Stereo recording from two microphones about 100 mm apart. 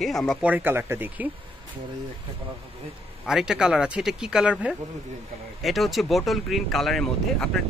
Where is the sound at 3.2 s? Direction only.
5° right (ahead or behind).